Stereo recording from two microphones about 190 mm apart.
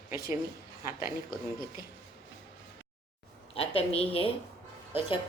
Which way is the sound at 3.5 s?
30° left (ahead or behind).